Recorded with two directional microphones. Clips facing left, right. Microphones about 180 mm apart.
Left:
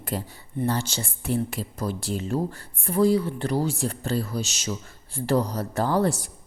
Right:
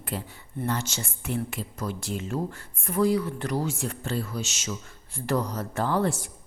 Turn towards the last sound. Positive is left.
turn(degrees=35)  # may be behind; listen again after turning